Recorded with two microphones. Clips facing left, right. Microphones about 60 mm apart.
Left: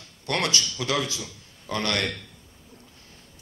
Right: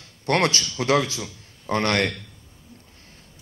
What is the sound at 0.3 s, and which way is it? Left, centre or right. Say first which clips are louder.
A man's voice: right 5 dB; right.